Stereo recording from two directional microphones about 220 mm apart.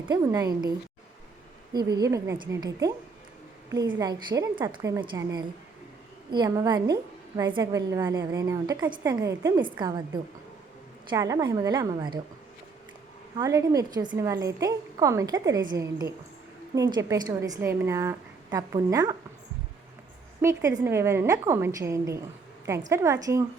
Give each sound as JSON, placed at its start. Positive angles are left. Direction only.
{"t": 0.1, "sound": "a woman's voice", "side_deg": -15}
{"t": 1.7, "sound": "a woman's voice", "side_deg": -20}
{"t": 3.9, "sound": "a woman's voice", "side_deg": -20}
{"t": 11.1, "sound": "a woman's voice", "side_deg": -15}
{"t": 13.3, "sound": "a woman's voice", "side_deg": -15}
{"t": 20.4, "sound": "a woman's voice", "side_deg": -15}